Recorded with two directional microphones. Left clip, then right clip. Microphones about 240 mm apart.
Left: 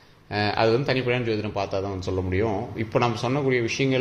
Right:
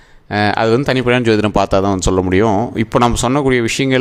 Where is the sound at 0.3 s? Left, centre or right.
Right.